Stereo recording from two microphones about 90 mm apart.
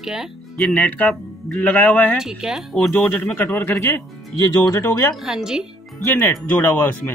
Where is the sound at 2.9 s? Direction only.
20° left (ahead or behind).